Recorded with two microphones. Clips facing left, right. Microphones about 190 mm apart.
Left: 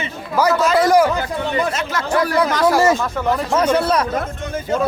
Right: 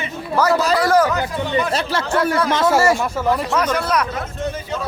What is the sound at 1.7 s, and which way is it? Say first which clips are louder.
Speech: right 2 dB; 35° right (ahead or behind).